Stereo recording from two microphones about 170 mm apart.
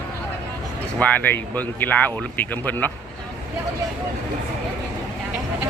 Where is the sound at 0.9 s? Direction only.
10° left (ahead or behind).